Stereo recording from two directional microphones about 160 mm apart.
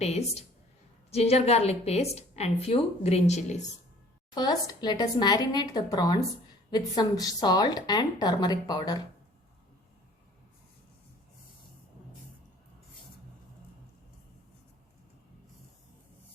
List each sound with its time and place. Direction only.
0.0 s a woman's voice: 40° left (ahead or behind)
4.4 s a woman's voice: 25° left (ahead or behind)